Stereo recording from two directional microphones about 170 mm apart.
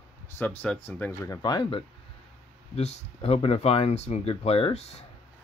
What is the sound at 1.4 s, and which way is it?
Speech, 25° left (ahead or behind).